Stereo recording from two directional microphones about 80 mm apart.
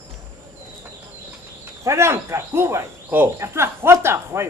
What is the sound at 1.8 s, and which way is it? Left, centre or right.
Speech, right.